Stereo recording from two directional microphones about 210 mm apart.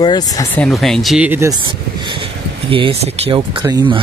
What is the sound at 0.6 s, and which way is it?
Speech, centre (ahead or behind).